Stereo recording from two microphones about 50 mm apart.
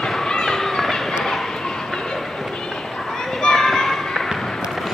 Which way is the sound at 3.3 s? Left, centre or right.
Centre.